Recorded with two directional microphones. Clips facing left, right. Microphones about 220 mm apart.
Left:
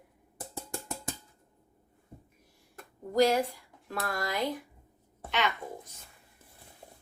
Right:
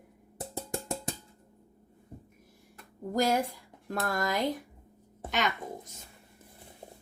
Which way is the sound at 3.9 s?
45° right (ahead or behind).